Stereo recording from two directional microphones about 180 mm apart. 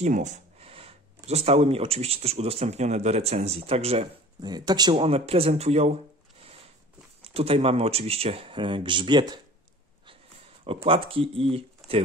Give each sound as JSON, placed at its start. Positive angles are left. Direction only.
{"t": 0.0, "sound": "speech", "side_deg": -40}
{"t": 7.2, "sound": "speech", "side_deg": -35}
{"t": 10.6, "sound": "speech", "side_deg": -30}
{"t": 11.8, "sound": "a sound", "side_deg": 0}